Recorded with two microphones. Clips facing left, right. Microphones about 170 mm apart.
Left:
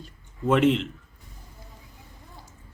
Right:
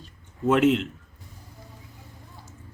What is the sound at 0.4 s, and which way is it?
Speech, 5° right (ahead or behind).